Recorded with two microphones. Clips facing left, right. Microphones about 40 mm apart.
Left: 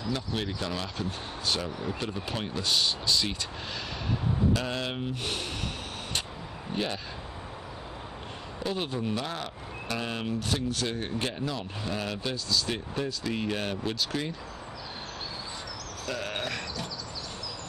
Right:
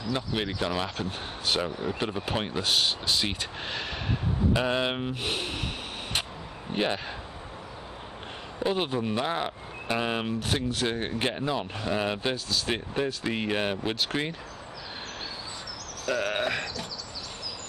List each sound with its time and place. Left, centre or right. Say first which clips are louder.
0.1 s speech: right 3 dB; right
6.7 s speech: right 4 dB; right
8.5 s speech: right 4 dB; right
16.1 s a sound: right 6 dB; right